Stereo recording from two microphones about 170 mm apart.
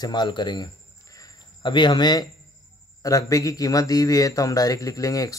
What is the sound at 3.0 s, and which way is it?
Speech, 20° left (ahead or behind).